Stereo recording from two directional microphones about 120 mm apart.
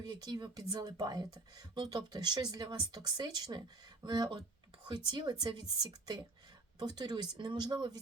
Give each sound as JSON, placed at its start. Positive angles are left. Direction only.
{"t": 0.0, "sound": "speech", "side_deg": -35}